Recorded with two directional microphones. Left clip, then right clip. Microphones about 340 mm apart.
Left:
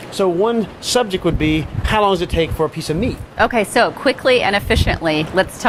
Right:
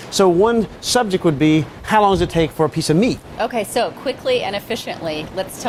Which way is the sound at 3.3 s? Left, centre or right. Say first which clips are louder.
Left 5 dB; left.